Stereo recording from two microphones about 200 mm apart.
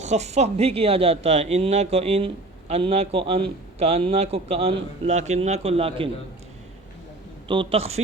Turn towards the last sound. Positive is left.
turn(degrees=-30)  # may be behind; listen again after turning